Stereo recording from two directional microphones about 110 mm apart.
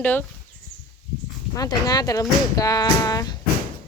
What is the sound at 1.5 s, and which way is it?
A woman's voice, 35° left (ahead or behind).